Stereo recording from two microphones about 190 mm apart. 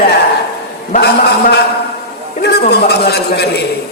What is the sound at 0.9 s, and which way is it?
A man's voice, 60° left (ahead or behind).